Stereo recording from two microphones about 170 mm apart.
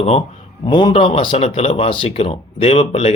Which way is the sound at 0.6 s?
25° left (ahead or behind).